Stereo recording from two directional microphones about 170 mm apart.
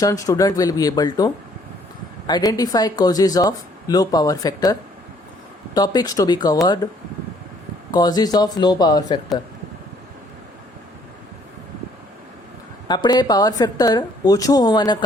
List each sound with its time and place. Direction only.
0.0 s speech: 20° left (ahead or behind)
7.9 s speech: 25° left (ahead or behind)
12.9 s speech: 25° left (ahead or behind)